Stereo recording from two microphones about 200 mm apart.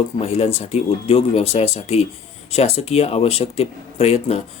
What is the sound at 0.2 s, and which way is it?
Speech, 30° left (ahead or behind).